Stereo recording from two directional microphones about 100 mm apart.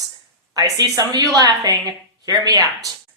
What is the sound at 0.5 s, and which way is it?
Speech, 40° right (ahead or behind).